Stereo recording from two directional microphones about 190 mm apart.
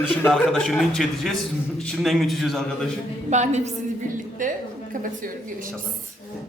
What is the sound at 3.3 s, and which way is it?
A woman's voice, 35° right (ahead or behind).